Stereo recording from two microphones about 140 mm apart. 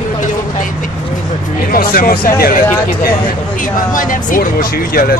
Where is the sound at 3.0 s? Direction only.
80° left.